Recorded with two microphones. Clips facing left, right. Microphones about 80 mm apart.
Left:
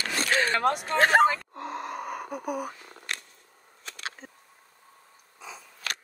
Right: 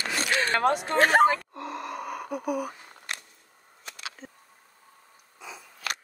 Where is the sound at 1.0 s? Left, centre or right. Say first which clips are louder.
Even; left.